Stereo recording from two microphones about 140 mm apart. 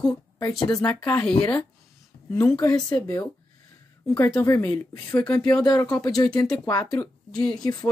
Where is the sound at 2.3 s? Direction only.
15° left (ahead or behind).